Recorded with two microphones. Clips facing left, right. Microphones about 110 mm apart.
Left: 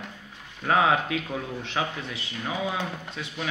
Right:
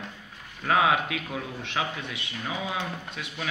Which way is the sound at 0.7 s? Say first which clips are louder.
Left 1 dB; 30° left (ahead or behind).